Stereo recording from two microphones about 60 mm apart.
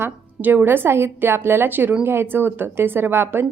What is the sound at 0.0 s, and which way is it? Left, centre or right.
A woman's voice, right.